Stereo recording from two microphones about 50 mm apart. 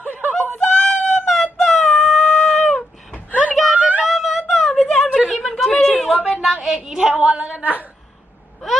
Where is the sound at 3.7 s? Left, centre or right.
Right.